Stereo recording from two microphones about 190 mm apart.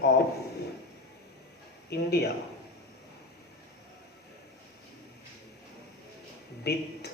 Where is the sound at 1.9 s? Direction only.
60° left (ahead or behind).